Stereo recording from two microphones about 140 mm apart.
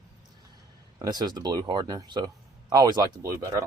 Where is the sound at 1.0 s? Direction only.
30° right (ahead or behind).